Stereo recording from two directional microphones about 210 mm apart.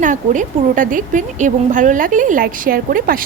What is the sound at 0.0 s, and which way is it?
Speech, 35° right (ahead or behind).